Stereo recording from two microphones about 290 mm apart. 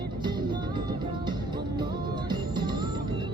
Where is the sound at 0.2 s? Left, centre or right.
Centre.